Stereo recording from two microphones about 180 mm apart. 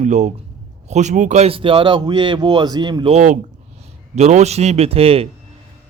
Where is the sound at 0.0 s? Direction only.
40° right (ahead or behind).